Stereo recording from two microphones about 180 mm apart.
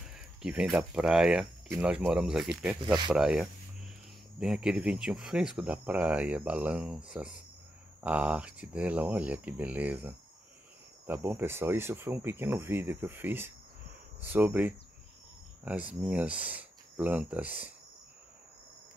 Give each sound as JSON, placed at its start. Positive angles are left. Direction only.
{"t": 0.1, "sound": "speech", "side_deg": -5}
{"t": 2.8, "sound": "speech", "side_deg": -25}
{"t": 3.1, "sound": "speech", "side_deg": -5}